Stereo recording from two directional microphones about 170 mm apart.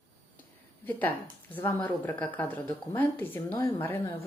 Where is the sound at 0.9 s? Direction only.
10° left (ahead or behind).